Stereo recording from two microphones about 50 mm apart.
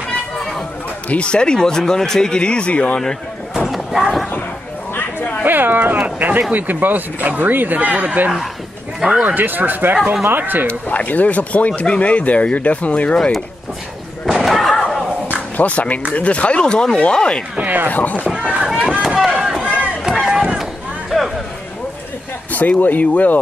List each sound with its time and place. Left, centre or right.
1.0 s speech: left
3.5 s a sound: centre
5.4 s speech: right
10.7 s speech: left
14.2 s slam: centre
15.5 s speech: left
17.6 s speech: right
17.9 s speech: left
18.4 s run: right
19.0 s run: centre
19.6 s run: right
20.0 s run: centre
21.1 s a sound: centre
22.5 s speech: left